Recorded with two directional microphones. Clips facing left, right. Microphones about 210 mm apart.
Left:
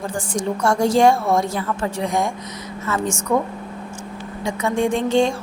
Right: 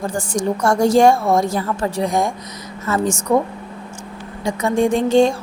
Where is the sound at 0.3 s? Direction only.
40° right (ahead or behind).